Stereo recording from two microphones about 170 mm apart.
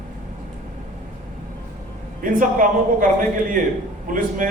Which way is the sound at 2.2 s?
50° right (ahead or behind).